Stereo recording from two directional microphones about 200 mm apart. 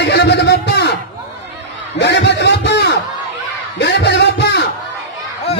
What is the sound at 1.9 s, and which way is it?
A man's voice, 60° left (ahead or behind).